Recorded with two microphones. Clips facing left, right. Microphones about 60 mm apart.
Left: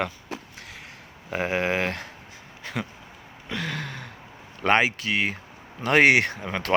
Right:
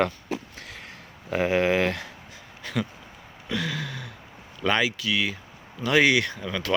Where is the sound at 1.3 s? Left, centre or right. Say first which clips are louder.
Right 3 dB; left.